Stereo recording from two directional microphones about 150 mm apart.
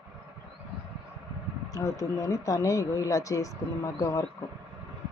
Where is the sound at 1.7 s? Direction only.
20° left (ahead or behind).